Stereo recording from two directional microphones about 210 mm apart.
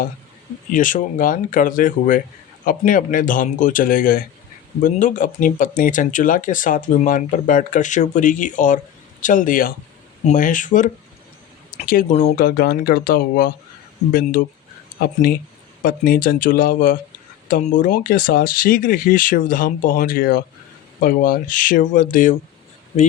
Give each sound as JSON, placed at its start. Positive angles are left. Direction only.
{"t": 0.7, "sound": "speech", "side_deg": 40}